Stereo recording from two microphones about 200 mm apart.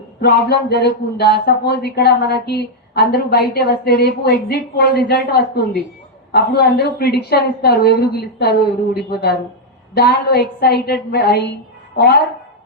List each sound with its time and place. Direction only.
0.2 s a man's voice: 50° left (ahead or behind)